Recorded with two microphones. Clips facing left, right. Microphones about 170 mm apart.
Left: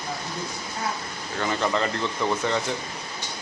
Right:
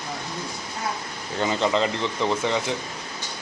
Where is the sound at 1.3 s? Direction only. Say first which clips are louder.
Right 3 dB; 20° right (ahead or behind).